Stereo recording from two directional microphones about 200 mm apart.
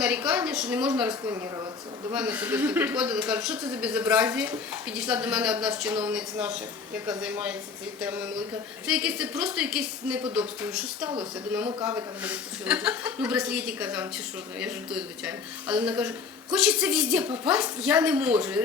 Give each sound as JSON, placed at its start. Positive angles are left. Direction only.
{"t": 0.0, "sound": "a woman's voice", "side_deg": -5}
{"t": 1.2, "sound": "speech", "side_deg": -15}